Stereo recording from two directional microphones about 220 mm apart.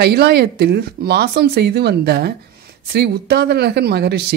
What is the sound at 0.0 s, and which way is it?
Speech, 50° right (ahead or behind).